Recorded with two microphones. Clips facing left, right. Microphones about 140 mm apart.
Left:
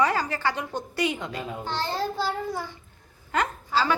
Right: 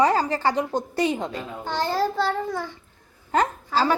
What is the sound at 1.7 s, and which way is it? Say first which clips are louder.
Speech: right 5 dB; 50° right (ahead or behind).